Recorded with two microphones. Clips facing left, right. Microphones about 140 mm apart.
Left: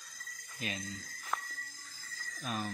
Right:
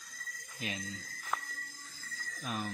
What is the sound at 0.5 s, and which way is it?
Speech, 20° right (ahead or behind).